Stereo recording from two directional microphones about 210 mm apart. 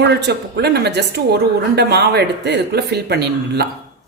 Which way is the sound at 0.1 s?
50° right (ahead or behind).